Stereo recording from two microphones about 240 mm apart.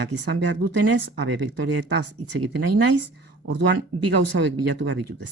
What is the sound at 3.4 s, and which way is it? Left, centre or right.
Speech, right.